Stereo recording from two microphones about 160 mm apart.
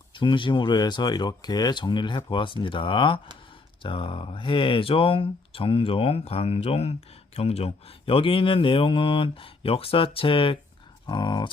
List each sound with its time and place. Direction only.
0.1 s speech: 30° left (ahead or behind)